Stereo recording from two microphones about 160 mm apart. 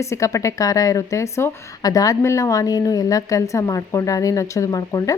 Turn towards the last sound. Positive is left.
turn(degrees=20)  # may be behind; listen again after turning